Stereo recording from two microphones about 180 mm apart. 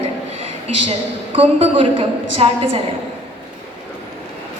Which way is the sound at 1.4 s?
35° right (ahead or behind).